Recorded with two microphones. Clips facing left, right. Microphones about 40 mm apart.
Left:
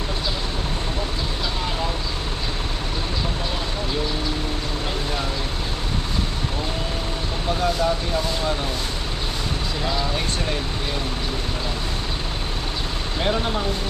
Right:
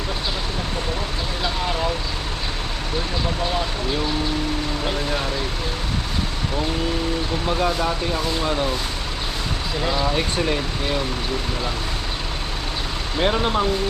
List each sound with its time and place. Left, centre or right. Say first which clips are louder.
7.4 s speech: left 1 dB; centre
9.8 s speech: right 4 dB; centre
13.1 s speech: right 3 dB; centre